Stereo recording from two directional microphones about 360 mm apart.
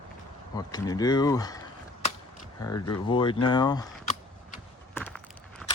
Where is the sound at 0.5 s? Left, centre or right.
Centre.